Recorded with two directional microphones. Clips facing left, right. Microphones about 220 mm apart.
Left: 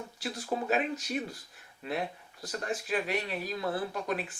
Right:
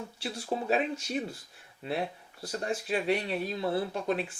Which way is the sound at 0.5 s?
30° right (ahead or behind).